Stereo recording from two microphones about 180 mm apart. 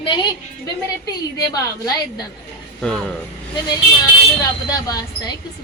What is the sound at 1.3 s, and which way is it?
Speech, 20° left (ahead or behind).